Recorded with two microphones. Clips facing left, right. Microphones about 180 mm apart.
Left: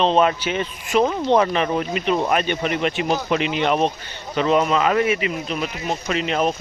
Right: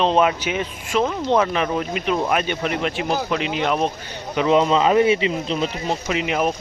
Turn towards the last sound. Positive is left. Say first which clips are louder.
# even
turn(degrees=-15)  # may be behind; listen again after turning